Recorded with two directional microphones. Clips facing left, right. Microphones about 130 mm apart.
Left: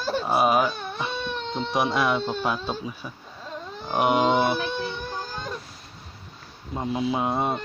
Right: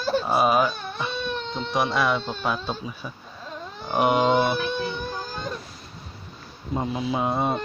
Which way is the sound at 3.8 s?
Centre (ahead or behind).